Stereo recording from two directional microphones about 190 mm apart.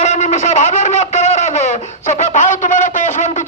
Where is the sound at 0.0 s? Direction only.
35° left (ahead or behind).